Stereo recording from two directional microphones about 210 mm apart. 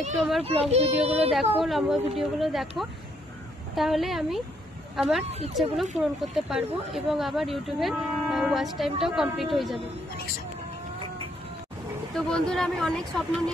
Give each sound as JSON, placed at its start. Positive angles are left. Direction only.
{"t": 0.4, "sound": "a child's voice", "side_deg": -30}
{"t": 1.3, "sound": "speech", "side_deg": 0}
{"t": 3.7, "sound": "speech", "side_deg": 0}
{"t": 12.3, "sound": "speech", "side_deg": 5}